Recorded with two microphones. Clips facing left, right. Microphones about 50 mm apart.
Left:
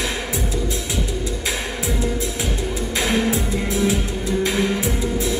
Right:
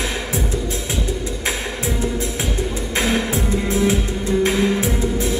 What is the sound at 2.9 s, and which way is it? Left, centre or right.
Music, right.